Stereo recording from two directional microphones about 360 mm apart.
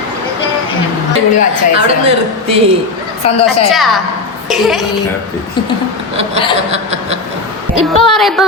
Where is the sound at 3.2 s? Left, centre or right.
Centre.